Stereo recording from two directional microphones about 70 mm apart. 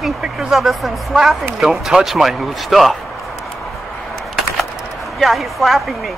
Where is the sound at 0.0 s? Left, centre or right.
Centre.